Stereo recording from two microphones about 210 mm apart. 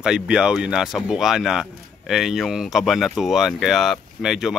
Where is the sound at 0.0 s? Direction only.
5° right (ahead or behind).